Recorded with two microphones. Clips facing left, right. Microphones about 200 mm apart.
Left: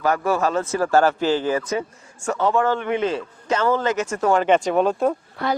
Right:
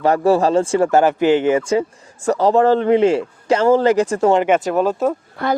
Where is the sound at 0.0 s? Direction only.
30° right (ahead or behind).